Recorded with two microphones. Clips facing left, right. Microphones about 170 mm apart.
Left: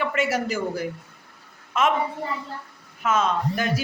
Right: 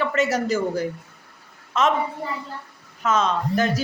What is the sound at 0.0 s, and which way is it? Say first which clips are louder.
Speech: right 2 dB; 10° left (ahead or behind).